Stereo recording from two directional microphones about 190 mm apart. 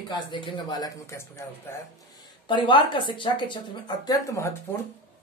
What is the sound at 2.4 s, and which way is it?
A woman's voice, 25° left (ahead or behind).